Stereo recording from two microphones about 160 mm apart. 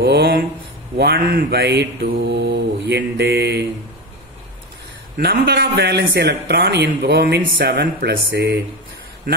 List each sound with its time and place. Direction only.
0.0 s mantra: 90° right
5.1 s mantra: 90° right